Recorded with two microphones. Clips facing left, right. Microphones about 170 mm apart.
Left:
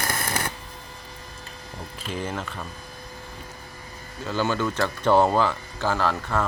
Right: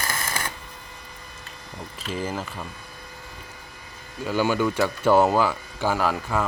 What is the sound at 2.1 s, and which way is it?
Speech, 5° right (ahead or behind).